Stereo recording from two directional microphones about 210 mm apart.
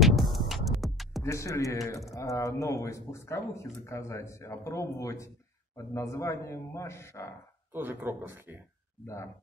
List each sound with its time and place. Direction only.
0.0 s music: centre (ahead or behind)
1.2 s speech: 15° left (ahead or behind)
7.7 s speech: 10° right (ahead or behind)
9.0 s speech: 15° left (ahead or behind)